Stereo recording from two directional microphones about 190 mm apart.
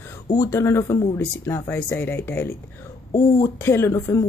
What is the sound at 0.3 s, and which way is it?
Speech, 15° left (ahead or behind).